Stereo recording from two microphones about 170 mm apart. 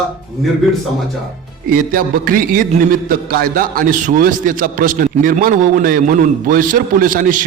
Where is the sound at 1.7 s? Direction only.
55° right (ahead or behind).